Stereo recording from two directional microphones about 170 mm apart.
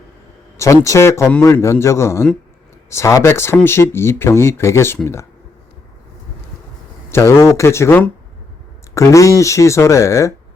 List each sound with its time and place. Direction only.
0.5 s speech: 15° left (ahead or behind)
7.1 s speech: 15° left (ahead or behind)